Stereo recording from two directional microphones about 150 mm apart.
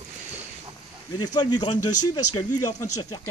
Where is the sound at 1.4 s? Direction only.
30° left (ahead or behind).